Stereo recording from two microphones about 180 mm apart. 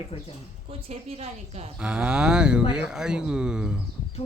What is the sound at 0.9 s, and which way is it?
Speech, 35° right (ahead or behind).